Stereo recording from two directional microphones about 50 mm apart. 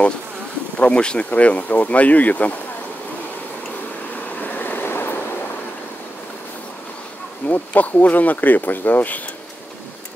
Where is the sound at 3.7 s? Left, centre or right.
Left.